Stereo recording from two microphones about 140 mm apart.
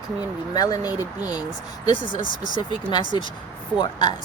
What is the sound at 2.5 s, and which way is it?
Speech, 30° left (ahead or behind).